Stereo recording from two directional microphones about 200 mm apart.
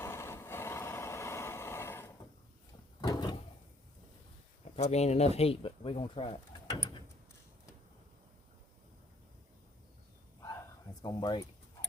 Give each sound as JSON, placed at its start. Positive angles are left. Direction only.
{"t": 0.0, "sound": "vehicle", "side_deg": 10}
{"t": 3.0, "sound": "drawer open or close", "side_deg": 20}
{"t": 4.8, "sound": "speech", "side_deg": 35}
{"t": 11.0, "sound": "speech", "side_deg": 20}